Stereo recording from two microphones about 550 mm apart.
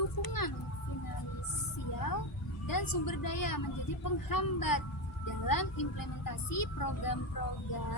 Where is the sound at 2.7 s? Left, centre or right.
Left.